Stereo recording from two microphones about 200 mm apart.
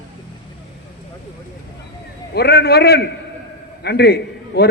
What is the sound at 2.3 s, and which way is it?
A man's voice, 55° left (ahead or behind).